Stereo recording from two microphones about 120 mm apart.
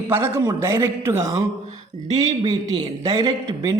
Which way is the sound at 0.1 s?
20° right (ahead or behind).